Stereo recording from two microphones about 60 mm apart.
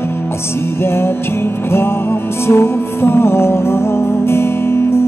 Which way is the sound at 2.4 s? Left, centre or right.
Left.